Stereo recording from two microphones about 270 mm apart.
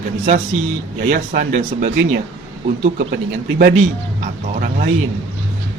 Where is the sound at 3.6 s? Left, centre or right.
Right.